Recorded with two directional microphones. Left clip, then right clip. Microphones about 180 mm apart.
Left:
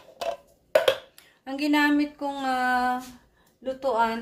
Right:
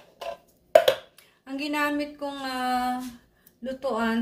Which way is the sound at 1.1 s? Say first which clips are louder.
Left 2 dB; 50° left (ahead or behind).